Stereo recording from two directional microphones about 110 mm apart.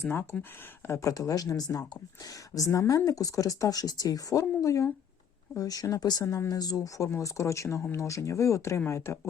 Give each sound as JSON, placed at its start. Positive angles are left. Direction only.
{"t": 0.1, "sound": "speech", "side_deg": 20}
{"t": 0.9, "sound": "speech", "side_deg": 30}